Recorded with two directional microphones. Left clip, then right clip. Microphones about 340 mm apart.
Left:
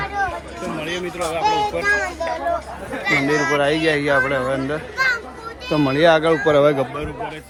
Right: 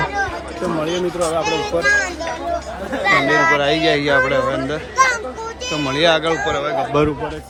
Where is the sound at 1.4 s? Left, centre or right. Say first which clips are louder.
Even; centre.